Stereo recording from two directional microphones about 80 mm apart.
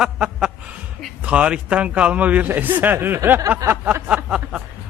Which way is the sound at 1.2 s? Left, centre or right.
Centre.